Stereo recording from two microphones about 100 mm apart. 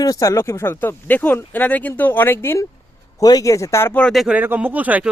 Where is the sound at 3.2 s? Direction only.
40° left (ahead or behind).